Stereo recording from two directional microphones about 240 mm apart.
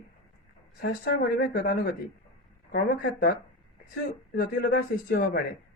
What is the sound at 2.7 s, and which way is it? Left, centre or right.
Speech, left.